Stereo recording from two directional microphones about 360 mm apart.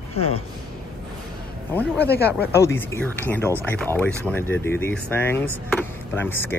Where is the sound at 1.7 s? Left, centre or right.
Centre.